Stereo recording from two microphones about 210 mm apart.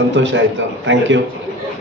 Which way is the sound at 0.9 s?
60° right (ahead or behind).